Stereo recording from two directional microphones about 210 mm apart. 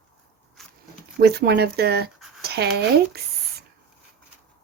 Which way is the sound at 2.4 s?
50° right (ahead or behind).